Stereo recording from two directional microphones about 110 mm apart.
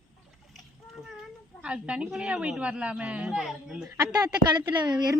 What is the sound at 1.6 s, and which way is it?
A woman's voice, 10° right (ahead or behind).